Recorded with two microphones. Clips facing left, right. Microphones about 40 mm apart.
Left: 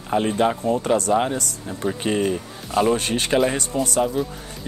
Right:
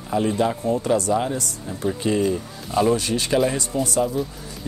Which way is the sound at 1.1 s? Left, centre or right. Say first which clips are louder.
Left 2 dB; left.